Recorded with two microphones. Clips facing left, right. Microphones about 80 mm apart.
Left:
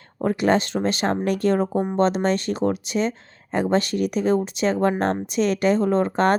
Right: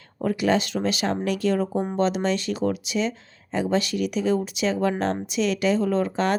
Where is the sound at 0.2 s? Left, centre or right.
Left.